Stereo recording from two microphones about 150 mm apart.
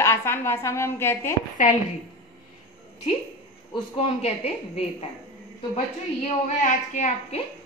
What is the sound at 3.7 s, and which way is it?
Speech, 40° left (ahead or behind).